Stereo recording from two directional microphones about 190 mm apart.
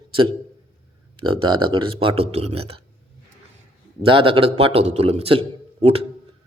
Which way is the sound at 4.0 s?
30° right (ahead or behind).